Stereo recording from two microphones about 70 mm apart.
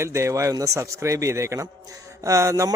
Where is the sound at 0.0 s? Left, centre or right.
Right.